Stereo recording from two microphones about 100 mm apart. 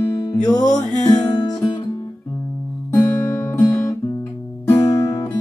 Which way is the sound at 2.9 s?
25° left (ahead or behind).